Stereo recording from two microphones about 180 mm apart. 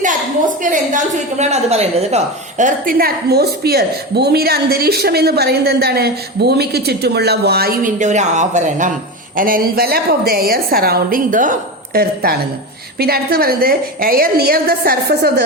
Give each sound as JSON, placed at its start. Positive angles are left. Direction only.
{"t": 0.0, "sound": "a woman's voice", "side_deg": -45}